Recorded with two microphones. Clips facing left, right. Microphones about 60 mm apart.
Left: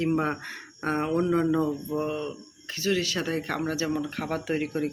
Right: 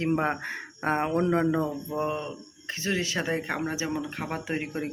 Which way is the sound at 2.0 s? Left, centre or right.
Right.